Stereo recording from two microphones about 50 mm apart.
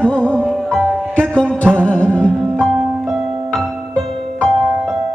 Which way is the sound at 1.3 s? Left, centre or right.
Left.